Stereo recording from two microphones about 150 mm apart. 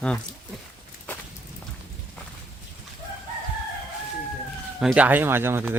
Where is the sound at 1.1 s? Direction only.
10° left (ahead or behind).